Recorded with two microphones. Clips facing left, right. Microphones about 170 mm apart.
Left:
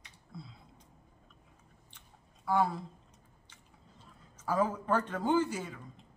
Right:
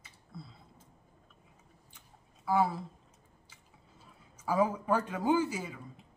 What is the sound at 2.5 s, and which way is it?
Speech, 5° right (ahead or behind).